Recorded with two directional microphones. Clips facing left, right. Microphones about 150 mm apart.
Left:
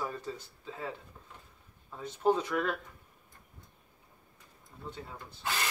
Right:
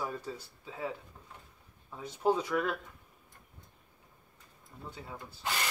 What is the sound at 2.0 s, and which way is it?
Speech, 10° right (ahead or behind).